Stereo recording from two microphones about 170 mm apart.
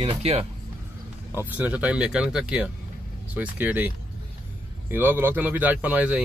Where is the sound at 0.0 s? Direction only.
35° right (ahead or behind).